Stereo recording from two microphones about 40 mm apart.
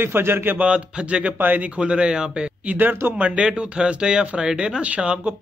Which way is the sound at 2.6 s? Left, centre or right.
Right.